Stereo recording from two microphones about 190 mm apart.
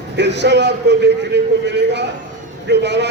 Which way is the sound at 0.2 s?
65° right (ahead or behind).